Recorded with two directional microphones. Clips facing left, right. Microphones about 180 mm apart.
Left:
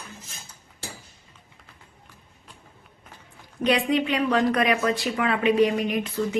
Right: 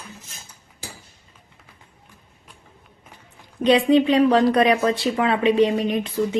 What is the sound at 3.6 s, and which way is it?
Speech, 30° right (ahead or behind).